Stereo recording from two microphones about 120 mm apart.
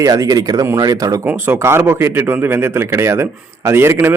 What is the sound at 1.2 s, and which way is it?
Speech, 15° right (ahead or behind).